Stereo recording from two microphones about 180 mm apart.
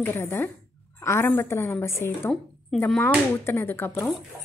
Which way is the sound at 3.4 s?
15° left (ahead or behind).